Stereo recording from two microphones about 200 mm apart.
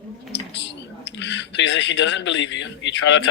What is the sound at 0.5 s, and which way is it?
Speech, 60° left (ahead or behind).